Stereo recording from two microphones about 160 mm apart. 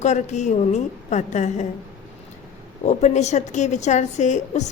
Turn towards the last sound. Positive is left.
turn(degrees=45)  # may be behind; listen again after turning